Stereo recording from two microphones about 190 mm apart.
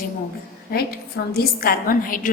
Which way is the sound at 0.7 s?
55° left (ahead or behind).